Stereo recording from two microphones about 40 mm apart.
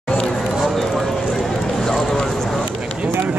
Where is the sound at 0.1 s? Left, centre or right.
Left.